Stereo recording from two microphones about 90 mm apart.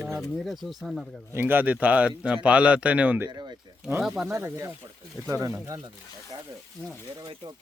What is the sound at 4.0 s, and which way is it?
Speech, 5° right (ahead or behind).